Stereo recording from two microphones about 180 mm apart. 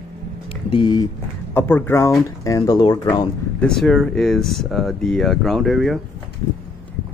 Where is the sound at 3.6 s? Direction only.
5° left (ahead or behind).